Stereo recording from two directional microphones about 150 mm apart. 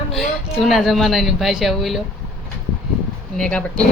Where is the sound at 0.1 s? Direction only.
Centre (ahead or behind).